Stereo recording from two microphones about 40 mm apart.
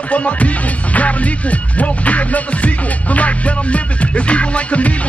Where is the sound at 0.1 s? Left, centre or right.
Left.